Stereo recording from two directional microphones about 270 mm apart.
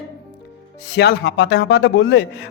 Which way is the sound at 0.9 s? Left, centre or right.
Left.